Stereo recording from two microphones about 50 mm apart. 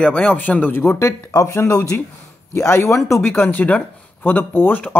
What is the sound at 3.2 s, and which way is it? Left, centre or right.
Speech, left.